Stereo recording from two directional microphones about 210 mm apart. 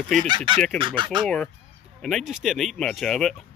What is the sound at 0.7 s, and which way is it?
Speech, 25° right (ahead or behind).